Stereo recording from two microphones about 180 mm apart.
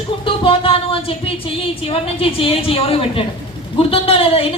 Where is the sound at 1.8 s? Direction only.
30° left (ahead or behind).